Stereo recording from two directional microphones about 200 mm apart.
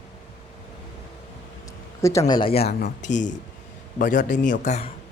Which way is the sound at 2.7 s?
45° left (ahead or behind).